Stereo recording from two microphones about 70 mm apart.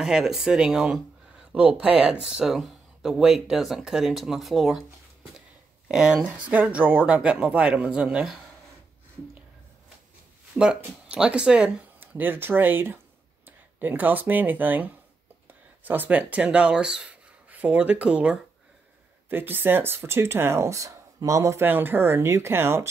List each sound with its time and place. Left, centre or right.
0.0 s speech: centre
6.5 s speech: right
11.1 s speech: centre
12.2 s speech: right
19.2 s speech: right
21.5 s speech: right